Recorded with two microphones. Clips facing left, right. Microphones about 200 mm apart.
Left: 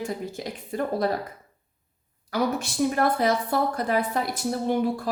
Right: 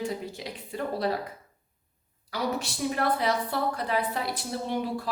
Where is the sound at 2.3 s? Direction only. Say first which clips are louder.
Left 5 dB; 50° left (ahead or behind).